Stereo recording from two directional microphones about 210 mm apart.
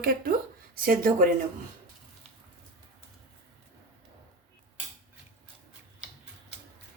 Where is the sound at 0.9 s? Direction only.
40° right (ahead or behind).